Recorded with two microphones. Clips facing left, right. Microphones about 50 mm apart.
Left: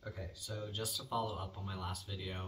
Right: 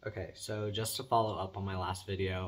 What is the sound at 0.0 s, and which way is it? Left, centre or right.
Speech, right.